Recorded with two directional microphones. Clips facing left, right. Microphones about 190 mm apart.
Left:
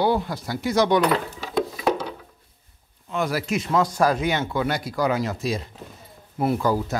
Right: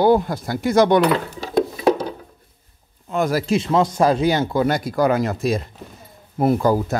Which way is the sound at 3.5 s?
30° right (ahead or behind).